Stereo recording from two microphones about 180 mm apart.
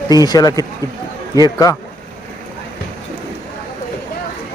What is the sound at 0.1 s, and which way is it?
Speech, 20° left (ahead or behind).